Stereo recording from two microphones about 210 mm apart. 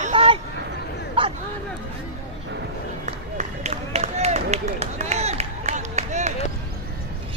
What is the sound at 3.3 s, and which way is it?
Run, 35° right (ahead or behind).